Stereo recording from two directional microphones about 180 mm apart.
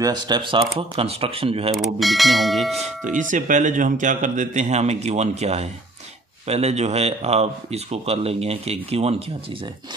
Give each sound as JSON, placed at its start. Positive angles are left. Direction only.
{"t": 0.0, "sound": "speech", "side_deg": -25}
{"t": 1.8, "sound": "speech", "side_deg": 0}
{"t": 2.8, "sound": "speech", "side_deg": -45}